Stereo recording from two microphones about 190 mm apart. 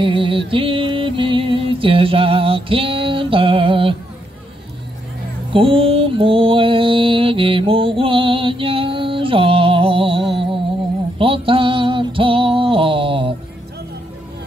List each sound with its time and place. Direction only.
0.0 s music: 25° right (ahead or behind)
5.5 s mantra: 30° right (ahead or behind)
11.1 s music: 30° right (ahead or behind)